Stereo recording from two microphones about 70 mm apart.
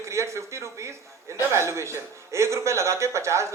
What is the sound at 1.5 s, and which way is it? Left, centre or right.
A man's voice, right.